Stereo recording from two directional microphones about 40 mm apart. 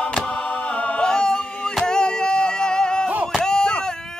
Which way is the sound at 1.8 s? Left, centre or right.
Centre.